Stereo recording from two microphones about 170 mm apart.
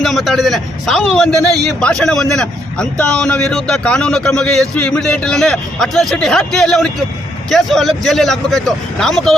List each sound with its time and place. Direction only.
0.0 s a man's voice: centre (ahead or behind)